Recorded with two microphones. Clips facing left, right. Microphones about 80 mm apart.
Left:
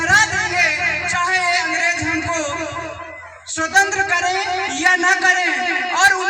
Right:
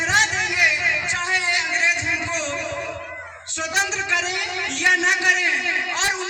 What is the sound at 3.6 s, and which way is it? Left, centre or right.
Music, left.